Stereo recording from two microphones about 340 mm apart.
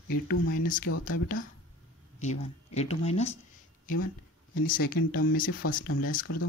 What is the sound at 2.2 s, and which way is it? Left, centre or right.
Speech, centre.